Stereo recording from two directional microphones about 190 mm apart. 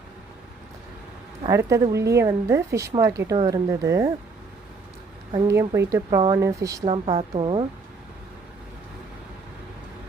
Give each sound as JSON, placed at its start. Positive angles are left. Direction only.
{"t": 1.5, "sound": "a woman's voice", "side_deg": -15}
{"t": 5.3, "sound": "a woman's voice", "side_deg": -15}
{"t": 6.8, "sound": "speech", "side_deg": -30}